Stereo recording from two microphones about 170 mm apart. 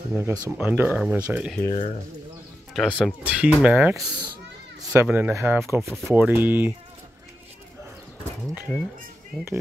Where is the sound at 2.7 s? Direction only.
Centre (ahead or behind).